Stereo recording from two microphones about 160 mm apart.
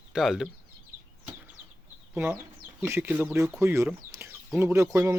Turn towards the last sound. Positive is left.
turn(degrees=-20)  # may be behind; listen again after turning